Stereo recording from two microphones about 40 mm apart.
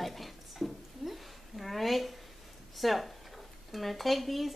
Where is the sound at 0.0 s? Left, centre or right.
Centre.